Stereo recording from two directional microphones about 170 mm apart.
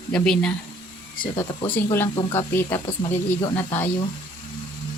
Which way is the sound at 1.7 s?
15° left (ahead or behind).